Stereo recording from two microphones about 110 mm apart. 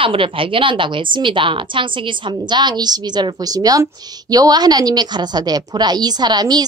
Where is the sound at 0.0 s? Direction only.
55° right (ahead or behind).